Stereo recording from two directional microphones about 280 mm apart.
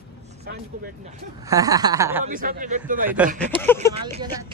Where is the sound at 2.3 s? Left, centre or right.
Right.